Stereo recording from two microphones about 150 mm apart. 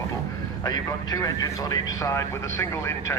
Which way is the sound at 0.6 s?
25° left (ahead or behind).